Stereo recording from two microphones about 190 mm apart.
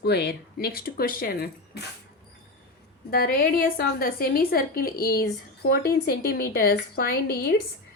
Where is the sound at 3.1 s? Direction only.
50° left (ahead or behind).